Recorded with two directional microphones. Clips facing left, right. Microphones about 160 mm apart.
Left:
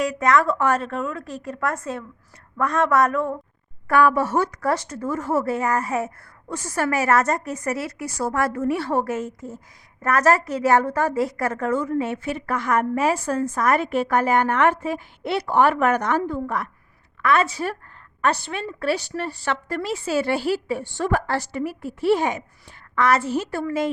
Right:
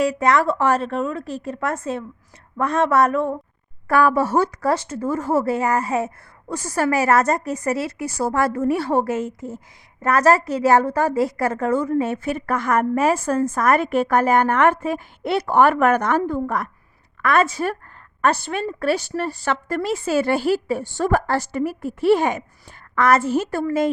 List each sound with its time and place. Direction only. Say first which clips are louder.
0.0 s a woman's voice: right 2 dB; 30° right (ahead or behind)